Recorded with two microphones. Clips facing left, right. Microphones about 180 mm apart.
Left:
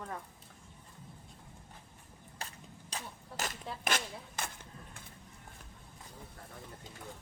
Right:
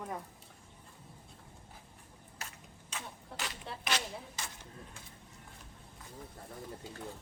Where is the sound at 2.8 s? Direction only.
40° left (ahead or behind).